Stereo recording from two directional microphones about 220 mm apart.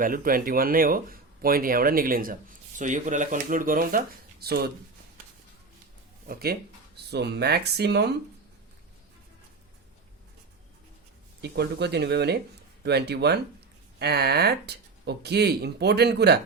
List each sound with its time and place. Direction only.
0.0 s speech: 40° right (ahead or behind)
6.2 s speech: 45° right (ahead or behind)
11.4 s speech: 45° right (ahead or behind)